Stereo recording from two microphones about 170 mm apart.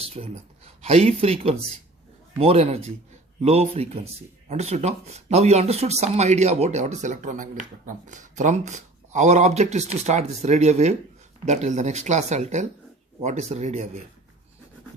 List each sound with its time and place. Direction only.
0.0 s speech: 35° right (ahead or behind)